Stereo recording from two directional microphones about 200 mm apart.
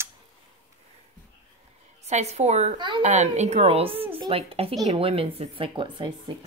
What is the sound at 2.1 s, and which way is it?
Speech, 35° right (ahead or behind).